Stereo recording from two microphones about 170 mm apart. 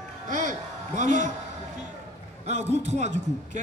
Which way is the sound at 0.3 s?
50° right (ahead or behind).